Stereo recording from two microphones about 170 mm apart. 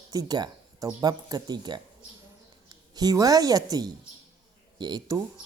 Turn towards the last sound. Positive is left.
turn(degrees=-20)  # may be behind; listen again after turning